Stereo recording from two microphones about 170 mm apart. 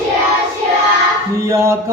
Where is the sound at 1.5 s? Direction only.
15° right (ahead or behind).